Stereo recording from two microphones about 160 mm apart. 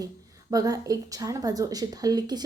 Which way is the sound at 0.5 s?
20° right (ahead or behind).